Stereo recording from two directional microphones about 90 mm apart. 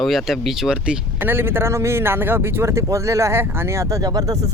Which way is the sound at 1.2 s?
25° right (ahead or behind).